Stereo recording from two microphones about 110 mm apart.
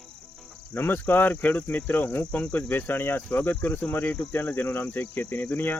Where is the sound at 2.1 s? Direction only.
15° left (ahead or behind).